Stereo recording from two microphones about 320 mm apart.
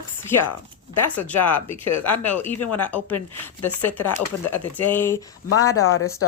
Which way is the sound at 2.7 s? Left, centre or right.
Centre.